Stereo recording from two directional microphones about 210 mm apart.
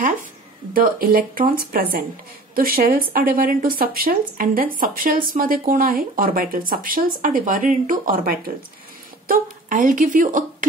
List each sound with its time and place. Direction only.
0.7 s speech: 45° right (ahead or behind)